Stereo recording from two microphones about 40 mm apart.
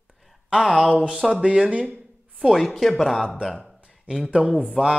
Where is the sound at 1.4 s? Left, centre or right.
Right.